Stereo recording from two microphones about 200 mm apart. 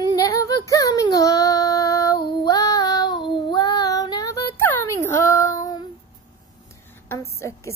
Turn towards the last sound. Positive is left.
turn(degrees=15)  # may be behind; listen again after turning